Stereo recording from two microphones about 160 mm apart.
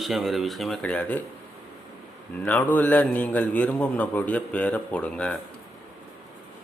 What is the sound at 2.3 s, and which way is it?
A man's voice, 10° left (ahead or behind).